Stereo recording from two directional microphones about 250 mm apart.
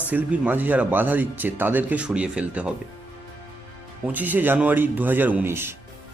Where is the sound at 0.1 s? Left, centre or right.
Centre.